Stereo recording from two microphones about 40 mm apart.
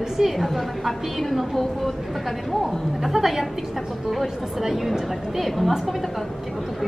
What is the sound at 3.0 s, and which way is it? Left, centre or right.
A woman's voice, centre.